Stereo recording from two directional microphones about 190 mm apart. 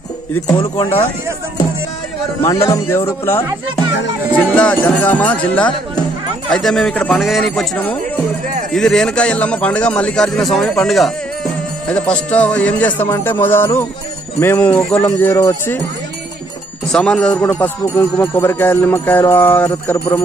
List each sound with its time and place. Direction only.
0.5 s speech: 25° left (ahead or behind)
2.4 s speech: 15° left (ahead or behind)
6.5 s a man's voice: centre (ahead or behind)
16.9 s speech: 5° left (ahead or behind)